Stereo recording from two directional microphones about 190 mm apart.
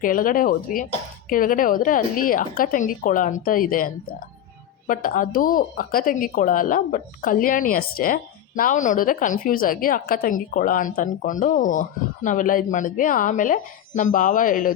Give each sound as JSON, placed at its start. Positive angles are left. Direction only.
{"t": 0.0, "sound": "speech", "side_deg": 45}